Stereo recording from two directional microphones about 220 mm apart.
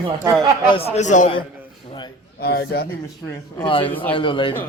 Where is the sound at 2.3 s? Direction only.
45° left (ahead or behind).